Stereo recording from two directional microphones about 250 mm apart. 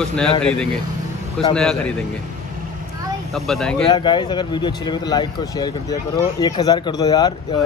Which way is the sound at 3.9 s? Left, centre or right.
Centre.